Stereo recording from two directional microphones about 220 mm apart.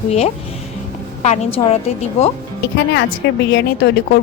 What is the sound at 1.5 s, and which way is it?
Speech, 30° left (ahead or behind).